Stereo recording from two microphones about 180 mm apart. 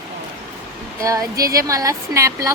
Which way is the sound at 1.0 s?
20° right (ahead or behind).